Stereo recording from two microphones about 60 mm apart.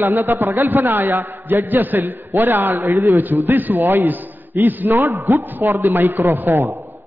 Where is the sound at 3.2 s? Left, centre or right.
Right.